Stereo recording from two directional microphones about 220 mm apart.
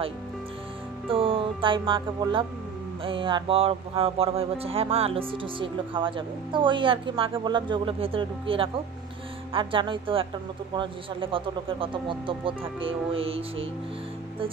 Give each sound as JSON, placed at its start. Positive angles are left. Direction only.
{"t": 1.0, "sound": "music", "side_deg": -25}
{"t": 3.0, "sound": "speech", "side_deg": -25}